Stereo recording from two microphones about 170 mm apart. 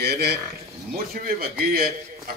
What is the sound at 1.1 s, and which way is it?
Speech, 60° right (ahead or behind).